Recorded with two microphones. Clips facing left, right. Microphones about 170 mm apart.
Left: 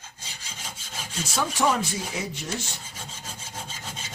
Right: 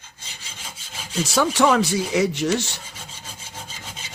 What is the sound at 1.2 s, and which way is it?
Speech, 85° right.